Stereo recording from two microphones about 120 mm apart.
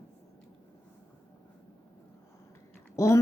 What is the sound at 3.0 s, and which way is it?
Speech, 25° left (ahead or behind).